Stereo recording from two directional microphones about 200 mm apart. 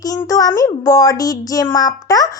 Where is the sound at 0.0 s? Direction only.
15° left (ahead or behind).